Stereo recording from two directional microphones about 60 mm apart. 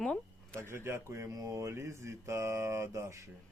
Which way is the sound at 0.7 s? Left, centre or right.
Right.